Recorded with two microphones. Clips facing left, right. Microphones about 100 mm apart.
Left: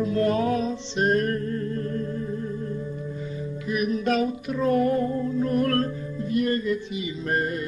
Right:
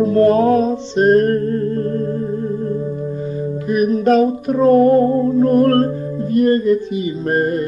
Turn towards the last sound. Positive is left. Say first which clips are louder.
# right 9 dB
turn(degrees=-45)  # may be behind; listen again after turning